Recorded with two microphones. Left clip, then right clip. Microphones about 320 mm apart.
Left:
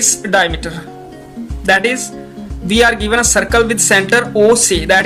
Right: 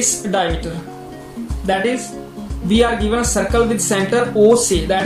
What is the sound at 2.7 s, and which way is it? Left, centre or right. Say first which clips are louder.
Speech: left 4 dB; left.